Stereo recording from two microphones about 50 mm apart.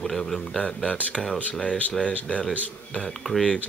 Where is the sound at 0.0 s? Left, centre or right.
Centre.